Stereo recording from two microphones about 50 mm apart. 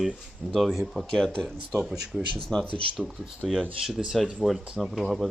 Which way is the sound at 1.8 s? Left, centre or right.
Centre.